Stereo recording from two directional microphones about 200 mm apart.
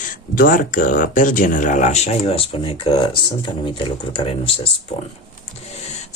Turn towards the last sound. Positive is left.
turn(degrees=35)  # may be behind; listen again after turning